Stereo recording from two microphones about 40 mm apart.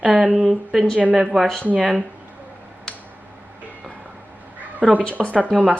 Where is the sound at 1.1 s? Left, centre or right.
Centre.